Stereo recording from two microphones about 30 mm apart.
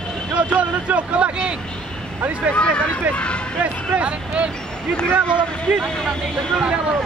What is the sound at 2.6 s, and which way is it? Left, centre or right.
Speech, left.